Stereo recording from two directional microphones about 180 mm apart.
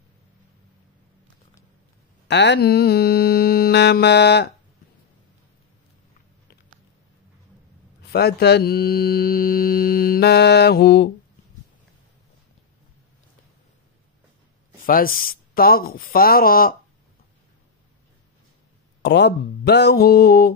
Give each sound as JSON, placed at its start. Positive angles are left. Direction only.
{"t": 2.2, "sound": "speech", "side_deg": 75}
{"t": 8.0, "sound": "speech", "side_deg": 65}
{"t": 14.9, "sound": "speech", "side_deg": 55}
{"t": 19.0, "sound": "speech", "side_deg": 70}